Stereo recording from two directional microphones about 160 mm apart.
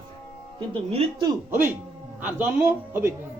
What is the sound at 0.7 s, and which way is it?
Speech, 40° right (ahead or behind).